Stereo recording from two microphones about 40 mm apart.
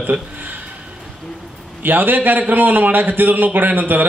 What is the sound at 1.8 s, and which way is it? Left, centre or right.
A man's voice, right.